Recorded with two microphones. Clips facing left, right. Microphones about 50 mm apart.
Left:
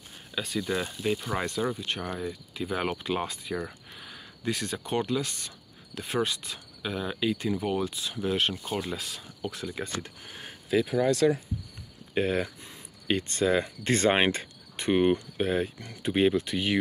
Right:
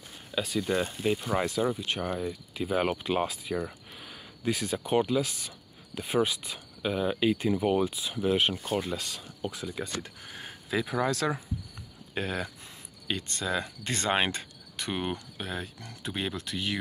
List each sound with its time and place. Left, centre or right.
0.3 s speech: centre
12.1 s speech: centre
13.1 s speech: left